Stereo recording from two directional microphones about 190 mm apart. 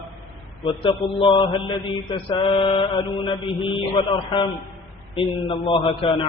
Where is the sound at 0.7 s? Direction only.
25° left (ahead or behind).